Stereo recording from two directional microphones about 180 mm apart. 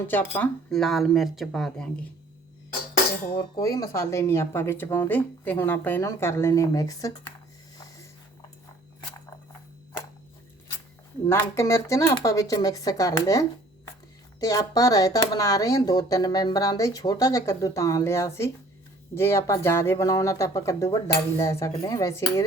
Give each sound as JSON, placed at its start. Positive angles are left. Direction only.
{"t": 0.1, "sound": "speech", "side_deg": 10}
{"t": 3.5, "sound": "a woman's voice", "side_deg": 20}
{"t": 11.3, "sound": "a woman's voice", "side_deg": 15}